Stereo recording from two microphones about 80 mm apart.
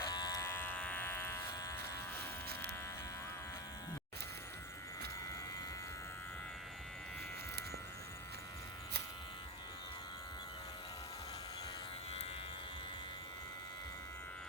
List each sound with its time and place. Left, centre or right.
0.0 s electric shaver: left
0.4 s electric shaver: left